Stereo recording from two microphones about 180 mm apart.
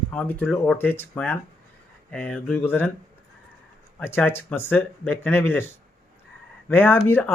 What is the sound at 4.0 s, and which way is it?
Speech, 10° left (ahead or behind).